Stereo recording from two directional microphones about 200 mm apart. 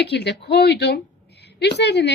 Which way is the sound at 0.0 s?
55° left (ahead or behind).